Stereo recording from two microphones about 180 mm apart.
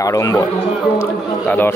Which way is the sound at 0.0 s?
20° left (ahead or behind).